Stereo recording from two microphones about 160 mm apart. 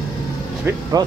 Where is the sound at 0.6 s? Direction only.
25° right (ahead or behind).